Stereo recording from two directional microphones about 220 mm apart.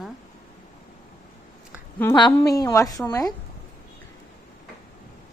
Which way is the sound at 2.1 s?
20° left (ahead or behind).